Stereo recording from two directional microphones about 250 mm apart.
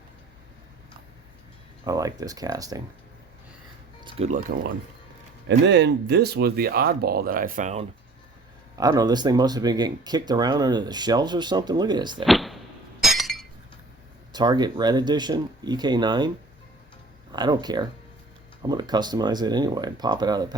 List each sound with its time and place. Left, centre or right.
1.8 s speech: centre
4.0 s speech: right
5.5 s speech: right
8.8 s speech: centre
12.2 s speech: centre
13.0 s glass: centre
14.3 s speech: centre
17.3 s speech: centre